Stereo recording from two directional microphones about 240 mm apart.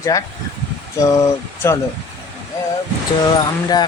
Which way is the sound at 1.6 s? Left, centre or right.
Centre.